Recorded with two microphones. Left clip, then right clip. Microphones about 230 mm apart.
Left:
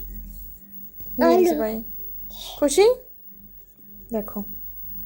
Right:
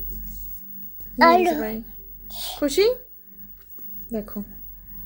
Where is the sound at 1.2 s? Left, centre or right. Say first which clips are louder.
Right 2 dB; right.